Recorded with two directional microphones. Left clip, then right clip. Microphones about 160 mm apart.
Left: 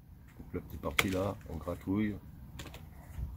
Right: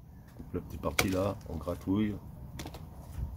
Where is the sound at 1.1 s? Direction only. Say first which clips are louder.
Right 3 dB; 15° left (ahead or behind).